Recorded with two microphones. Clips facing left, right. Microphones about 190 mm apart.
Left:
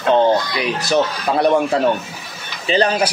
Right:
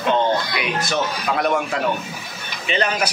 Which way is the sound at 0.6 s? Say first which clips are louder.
Left 5 dB; 35° left (ahead or behind).